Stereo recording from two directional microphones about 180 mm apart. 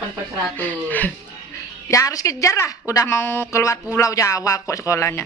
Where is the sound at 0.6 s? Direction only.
10° left (ahead or behind).